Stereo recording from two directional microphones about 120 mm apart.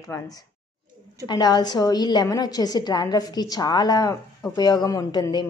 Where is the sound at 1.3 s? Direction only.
35° left (ahead or behind).